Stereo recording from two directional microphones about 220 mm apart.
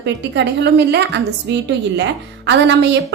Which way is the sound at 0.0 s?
50° right (ahead or behind).